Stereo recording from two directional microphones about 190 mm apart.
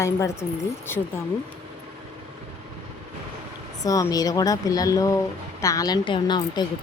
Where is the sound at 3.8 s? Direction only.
20° left (ahead or behind).